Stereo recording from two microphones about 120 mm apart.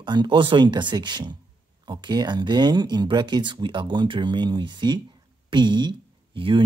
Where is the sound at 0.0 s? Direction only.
40° right (ahead or behind).